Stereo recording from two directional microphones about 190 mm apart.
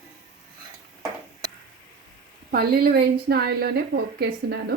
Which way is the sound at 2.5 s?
55° right (ahead or behind).